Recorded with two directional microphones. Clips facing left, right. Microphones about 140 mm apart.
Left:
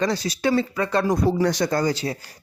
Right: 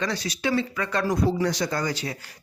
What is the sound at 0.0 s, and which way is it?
Speech, 35° left (ahead or behind).